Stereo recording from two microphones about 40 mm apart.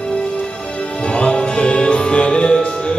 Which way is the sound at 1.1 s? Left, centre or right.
Left.